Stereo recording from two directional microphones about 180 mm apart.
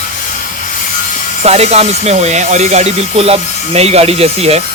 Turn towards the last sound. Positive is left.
turn(degrees=-35)  # may be behind; listen again after turning